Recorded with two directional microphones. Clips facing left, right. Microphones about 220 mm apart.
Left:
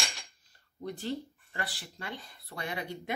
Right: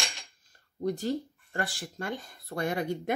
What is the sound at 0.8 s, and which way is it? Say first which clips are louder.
Speech: right 6 dB; 40° right (ahead or behind).